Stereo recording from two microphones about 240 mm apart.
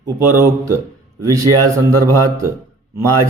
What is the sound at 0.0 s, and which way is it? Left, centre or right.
A man's voice, centre.